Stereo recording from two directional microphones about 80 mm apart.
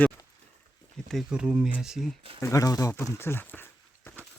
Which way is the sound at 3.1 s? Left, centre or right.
Left.